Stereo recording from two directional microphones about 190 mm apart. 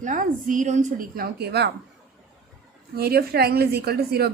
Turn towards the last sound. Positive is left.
turn(degrees=-55)  # may be behind; listen again after turning